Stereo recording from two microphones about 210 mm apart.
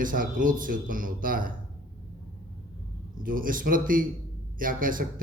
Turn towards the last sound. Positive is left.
turn(degrees=-40)  # may be behind; listen again after turning